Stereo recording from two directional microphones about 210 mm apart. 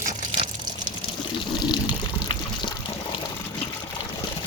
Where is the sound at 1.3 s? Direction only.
20° left (ahead or behind).